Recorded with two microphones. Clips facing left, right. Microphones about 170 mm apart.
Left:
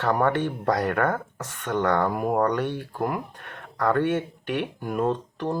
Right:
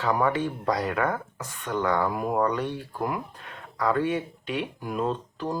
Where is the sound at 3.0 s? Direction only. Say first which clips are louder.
Left 2 dB; 55° left (ahead or behind).